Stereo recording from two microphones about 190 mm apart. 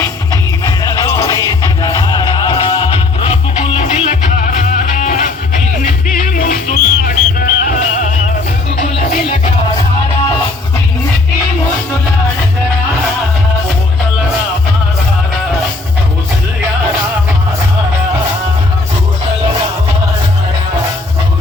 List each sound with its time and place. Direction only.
0.8 s music: 15° left (ahead or behind); by 9.5 s 45° left (ahead or behind)